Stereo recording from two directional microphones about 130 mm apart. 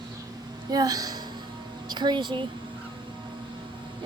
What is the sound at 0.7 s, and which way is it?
A woman's voice, 30° right (ahead or behind).